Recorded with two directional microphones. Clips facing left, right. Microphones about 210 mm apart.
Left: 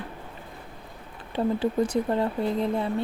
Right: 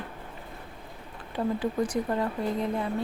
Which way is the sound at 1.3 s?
25° left (ahead or behind).